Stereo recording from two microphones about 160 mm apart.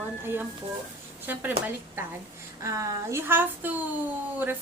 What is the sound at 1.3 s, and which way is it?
A woman's voice, 10° right (ahead or behind).